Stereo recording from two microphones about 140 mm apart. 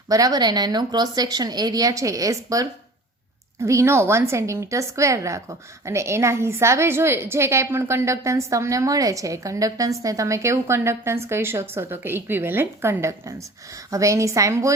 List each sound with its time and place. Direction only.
0.1 s a woman's voice: 25° right (ahead or behind)